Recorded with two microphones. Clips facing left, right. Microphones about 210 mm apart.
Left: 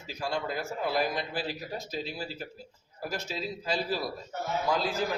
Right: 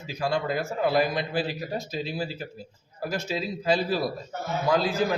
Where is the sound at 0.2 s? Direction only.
70° right (ahead or behind).